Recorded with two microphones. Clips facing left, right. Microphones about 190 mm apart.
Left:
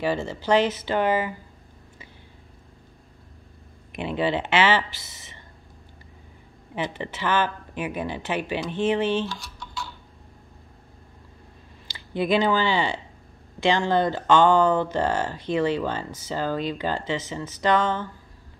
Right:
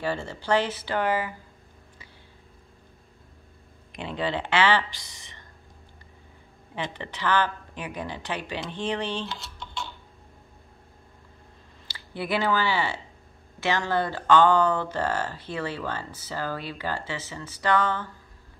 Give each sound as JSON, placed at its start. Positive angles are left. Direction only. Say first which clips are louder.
{"t": 0.0, "sound": "a woman's voice", "louder": "left 4 dB", "side_deg": 10}
{"t": 4.0, "sound": "a woman's voice", "louder": "left 4 dB", "side_deg": 15}
{"t": 6.7, "sound": "a woman's voice", "louder": "left 4 dB", "side_deg": 15}
{"t": 9.1, "sound": "typing", "louder": "left 7 dB", "side_deg": -20}
{"t": 12.1, "sound": "a woman's voice", "louder": "left 5 dB", "side_deg": 20}